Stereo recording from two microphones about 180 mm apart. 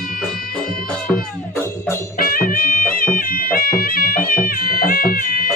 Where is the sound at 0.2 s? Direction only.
Centre (ahead or behind).